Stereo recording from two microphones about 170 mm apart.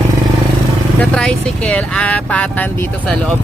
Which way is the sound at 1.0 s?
5° left (ahead or behind).